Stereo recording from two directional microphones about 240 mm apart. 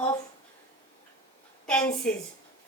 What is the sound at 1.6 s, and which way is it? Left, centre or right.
Speech, centre.